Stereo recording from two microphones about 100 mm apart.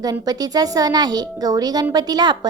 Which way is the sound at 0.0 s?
40° right (ahead or behind).